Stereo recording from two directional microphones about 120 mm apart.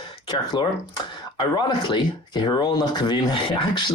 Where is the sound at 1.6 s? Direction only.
40° left (ahead or behind).